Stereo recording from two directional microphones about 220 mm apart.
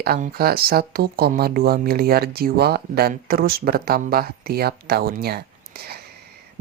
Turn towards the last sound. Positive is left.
turn(degrees=-45)  # may be behind; listen again after turning